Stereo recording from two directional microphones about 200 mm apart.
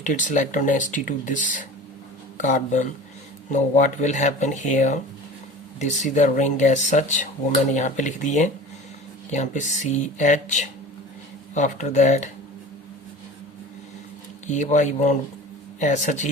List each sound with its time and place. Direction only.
0.0 s speech: 40° left (ahead or behind)
14.4 s speech: 35° left (ahead or behind)